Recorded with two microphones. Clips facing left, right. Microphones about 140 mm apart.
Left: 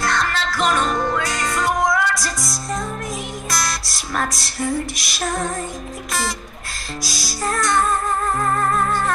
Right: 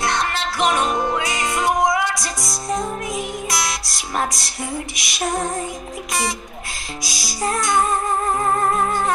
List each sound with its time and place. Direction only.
0.0 s music: 25° right (ahead or behind)
1.3 s music: centre (ahead or behind)
1.6 s music: 20° right (ahead or behind)
2.1 s music: centre (ahead or behind)
2.5 s music: 20° right (ahead or behind)
3.4 s music: centre (ahead or behind)
4.3 s female singing: centre (ahead or behind)
7.0 s female singing: centre (ahead or behind)
7.5 s music: 20° right (ahead or behind)